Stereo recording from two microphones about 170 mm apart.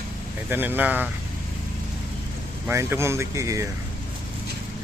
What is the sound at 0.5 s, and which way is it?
Speech, 10° right (ahead or behind).